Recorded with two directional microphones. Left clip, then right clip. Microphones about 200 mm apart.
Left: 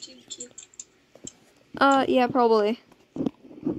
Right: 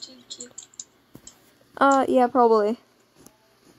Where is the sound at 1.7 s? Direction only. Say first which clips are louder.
Right 1 dB; 15° left (ahead or behind).